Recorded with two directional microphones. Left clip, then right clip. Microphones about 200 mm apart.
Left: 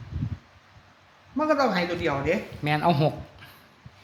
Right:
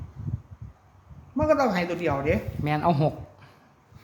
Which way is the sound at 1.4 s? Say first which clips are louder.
Right 1 dB; 45° right (ahead or behind).